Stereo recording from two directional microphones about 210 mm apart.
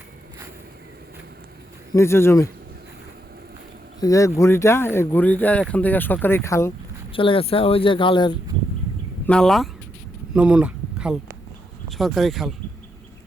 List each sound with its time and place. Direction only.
1.9 s speech: 10° left (ahead or behind)
4.0 s speech: 15° left (ahead or behind)
7.1 s speech: 25° left (ahead or behind)
9.2 s speech: 5° left (ahead or behind)